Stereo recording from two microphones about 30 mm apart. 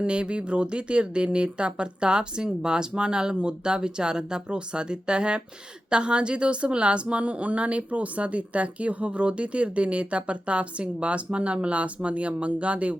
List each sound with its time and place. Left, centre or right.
0.0 s speech: right